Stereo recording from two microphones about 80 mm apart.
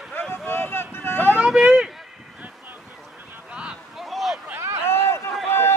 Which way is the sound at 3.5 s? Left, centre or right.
Centre.